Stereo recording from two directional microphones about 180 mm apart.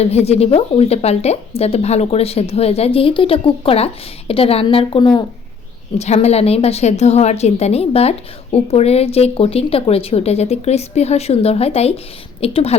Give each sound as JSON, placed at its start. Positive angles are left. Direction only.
{"t": 0.0, "sound": "speech", "side_deg": 35}
{"t": 6.0, "sound": "speech", "side_deg": 35}